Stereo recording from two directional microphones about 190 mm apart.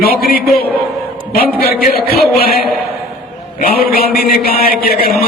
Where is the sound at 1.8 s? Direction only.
55° left (ahead or behind).